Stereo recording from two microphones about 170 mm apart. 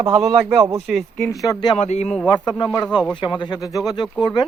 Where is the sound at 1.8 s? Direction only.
40° left (ahead or behind).